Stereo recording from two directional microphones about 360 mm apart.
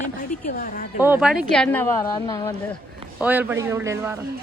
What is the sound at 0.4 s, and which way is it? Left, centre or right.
Speech, left.